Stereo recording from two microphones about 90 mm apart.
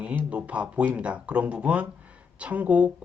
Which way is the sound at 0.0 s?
15° right (ahead or behind).